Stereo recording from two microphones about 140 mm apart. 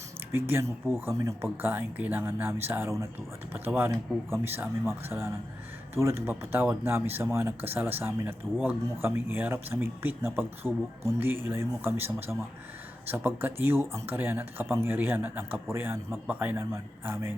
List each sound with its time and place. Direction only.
0.3 s speech: 15° right (ahead or behind)